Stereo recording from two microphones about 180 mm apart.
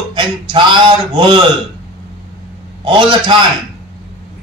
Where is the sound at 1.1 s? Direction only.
25° right (ahead or behind).